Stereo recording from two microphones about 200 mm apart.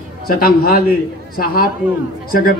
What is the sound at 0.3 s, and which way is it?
A man's voice, 50° left (ahead or behind).